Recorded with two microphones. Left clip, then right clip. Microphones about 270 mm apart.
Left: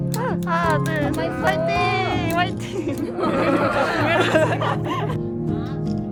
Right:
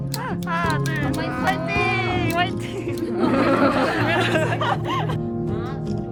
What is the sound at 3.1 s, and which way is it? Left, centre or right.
Chatter, right.